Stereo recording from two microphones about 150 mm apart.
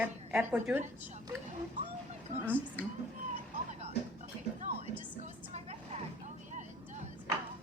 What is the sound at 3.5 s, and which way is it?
Music, 45° right (ahead or behind).